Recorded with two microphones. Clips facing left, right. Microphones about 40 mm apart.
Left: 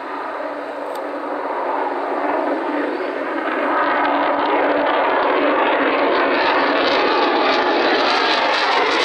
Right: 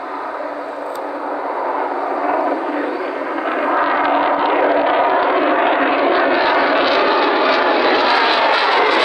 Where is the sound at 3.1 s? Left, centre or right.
Left.